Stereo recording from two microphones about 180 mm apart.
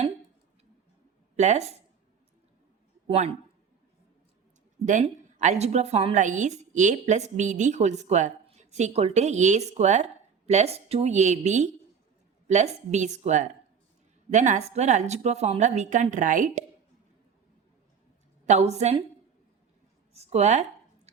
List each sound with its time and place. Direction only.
1.4 s a woman's voice: 40° right (ahead or behind)
3.1 s a woman's voice: 35° right (ahead or behind)
4.9 s a woman's voice: 45° right (ahead or behind)
18.4 s a woman's voice: 40° right (ahead or behind)
20.1 s a woman's voice: 35° right (ahead or behind)